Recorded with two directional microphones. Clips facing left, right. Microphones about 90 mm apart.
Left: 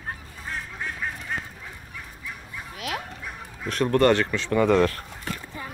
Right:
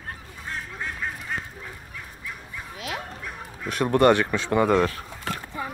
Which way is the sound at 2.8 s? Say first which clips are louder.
Left 2 dB; 25° right (ahead or behind).